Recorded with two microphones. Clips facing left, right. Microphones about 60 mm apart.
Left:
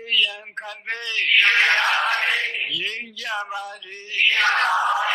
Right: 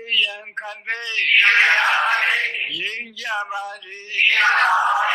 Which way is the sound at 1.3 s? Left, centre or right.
Centre.